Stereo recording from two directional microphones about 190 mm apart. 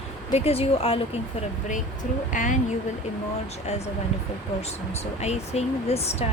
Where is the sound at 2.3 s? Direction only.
40° left (ahead or behind).